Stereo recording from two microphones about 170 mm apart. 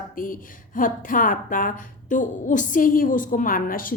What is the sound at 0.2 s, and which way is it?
A woman's voice, 55° left (ahead or behind).